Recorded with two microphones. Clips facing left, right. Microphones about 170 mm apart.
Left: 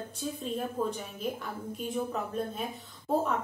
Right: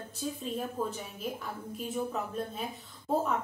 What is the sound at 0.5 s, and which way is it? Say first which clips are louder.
A woman's voice: left 2 dB; centre (ahead or behind).